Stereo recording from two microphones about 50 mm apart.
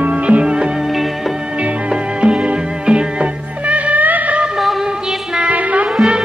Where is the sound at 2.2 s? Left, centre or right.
Right.